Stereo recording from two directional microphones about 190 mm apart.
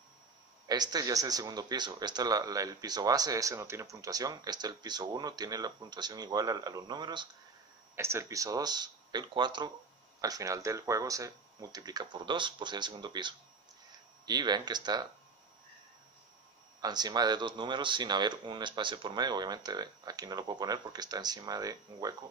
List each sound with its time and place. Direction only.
0.7 s speech: 20° right (ahead or behind)
16.8 s speech: 20° right (ahead or behind)